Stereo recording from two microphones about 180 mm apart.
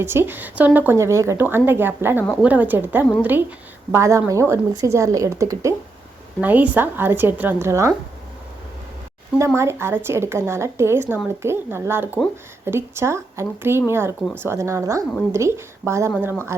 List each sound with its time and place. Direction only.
0.0 s speech: 10° right (ahead or behind)
9.6 s speech: 15° right (ahead or behind)